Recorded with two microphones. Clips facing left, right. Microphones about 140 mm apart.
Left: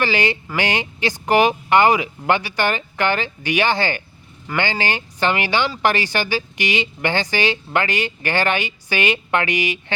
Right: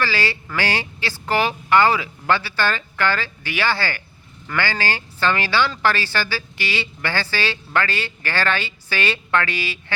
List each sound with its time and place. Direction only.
0.0 s speech: 20° left (ahead or behind)